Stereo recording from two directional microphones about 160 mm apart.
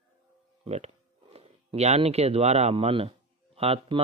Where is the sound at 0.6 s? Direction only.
45° right (ahead or behind).